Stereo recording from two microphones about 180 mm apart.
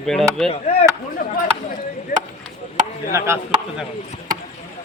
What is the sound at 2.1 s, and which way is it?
Chop, 50° left (ahead or behind).